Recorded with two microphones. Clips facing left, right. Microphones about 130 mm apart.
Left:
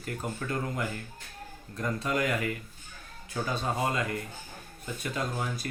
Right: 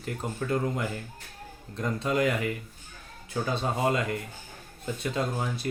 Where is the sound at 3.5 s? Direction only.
25° right (ahead or behind).